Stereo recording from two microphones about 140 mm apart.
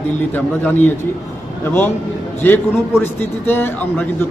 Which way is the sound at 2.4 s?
15° left (ahead or behind).